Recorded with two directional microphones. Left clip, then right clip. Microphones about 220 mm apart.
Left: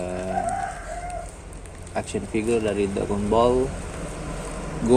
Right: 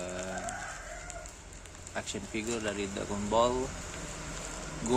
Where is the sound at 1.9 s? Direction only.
5° left (ahead or behind).